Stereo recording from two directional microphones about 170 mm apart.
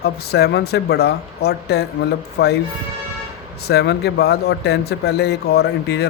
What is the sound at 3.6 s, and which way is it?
Speech, 70° left (ahead or behind).